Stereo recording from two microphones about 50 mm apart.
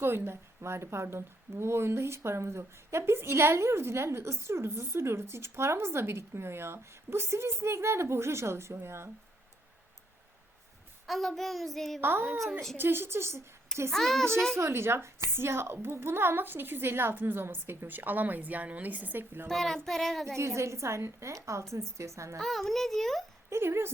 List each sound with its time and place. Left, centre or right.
0.0 s a woman's voice: right
11.0 s a sound: centre
11.9 s a woman's voice: right
13.9 s child singing: centre
14.6 s a woman's voice: right
19.5 s a sound: centre
19.8 s child singing: centre
20.2 s a woman's voice: right
22.4 s a sound: centre
23.5 s a woman's voice: right